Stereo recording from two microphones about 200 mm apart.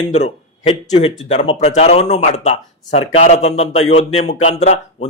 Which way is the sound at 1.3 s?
35° left (ahead or behind).